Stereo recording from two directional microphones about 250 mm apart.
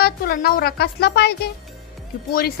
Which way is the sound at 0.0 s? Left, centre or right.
Left.